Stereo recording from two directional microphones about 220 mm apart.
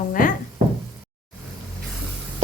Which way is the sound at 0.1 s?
40° left (ahead or behind).